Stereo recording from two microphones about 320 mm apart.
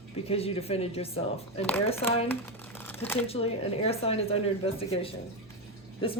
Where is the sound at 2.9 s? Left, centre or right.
Centre.